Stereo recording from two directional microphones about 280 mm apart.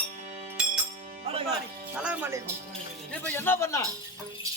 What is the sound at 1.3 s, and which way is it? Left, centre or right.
Music, centre.